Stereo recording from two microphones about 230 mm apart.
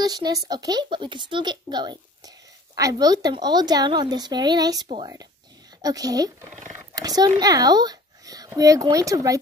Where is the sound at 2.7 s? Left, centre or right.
Centre.